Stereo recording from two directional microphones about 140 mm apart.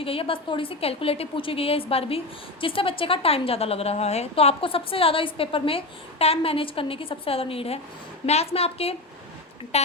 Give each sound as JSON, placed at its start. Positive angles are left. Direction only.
{"t": 0.0, "sound": "a woman's voice", "side_deg": 40}